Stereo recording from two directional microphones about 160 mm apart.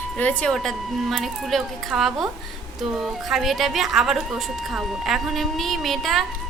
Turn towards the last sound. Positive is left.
turn(degrees=0)  # may be behind; listen again after turning